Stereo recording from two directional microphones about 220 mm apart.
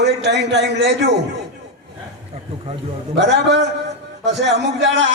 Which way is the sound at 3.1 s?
50° right (ahead or behind).